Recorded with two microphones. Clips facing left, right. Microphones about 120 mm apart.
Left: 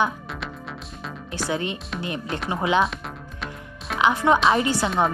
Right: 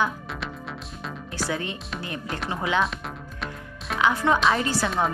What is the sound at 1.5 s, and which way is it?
Speech, 20° left (ahead or behind).